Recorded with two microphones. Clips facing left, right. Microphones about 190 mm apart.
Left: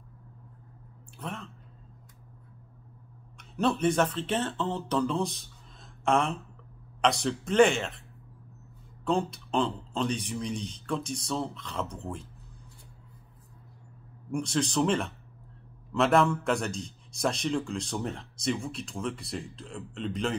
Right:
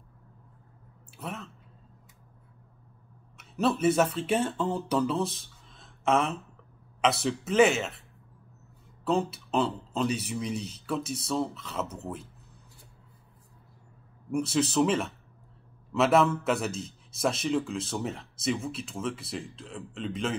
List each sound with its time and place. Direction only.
1.1 s speech: 5° right (ahead or behind)
3.3 s a man's voice: 5° right (ahead or behind)
9.0 s a man's voice: 5° right (ahead or behind)
14.3 s a man's voice: 5° right (ahead or behind)